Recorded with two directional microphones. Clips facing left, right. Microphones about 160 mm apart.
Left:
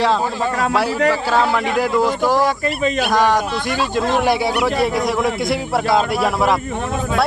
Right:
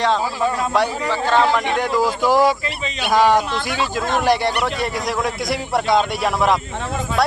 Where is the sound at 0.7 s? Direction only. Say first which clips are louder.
Left 3 dB; 5° left (ahead or behind).